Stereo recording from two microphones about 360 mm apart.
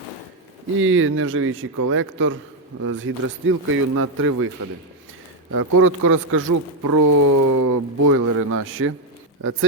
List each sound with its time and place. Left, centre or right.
0.8 s a man's voice: right
5.8 s a man's voice: right
6.5 s speech: right
8.1 s a man's voice: right